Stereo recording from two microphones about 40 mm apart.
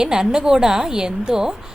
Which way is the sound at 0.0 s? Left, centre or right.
Centre.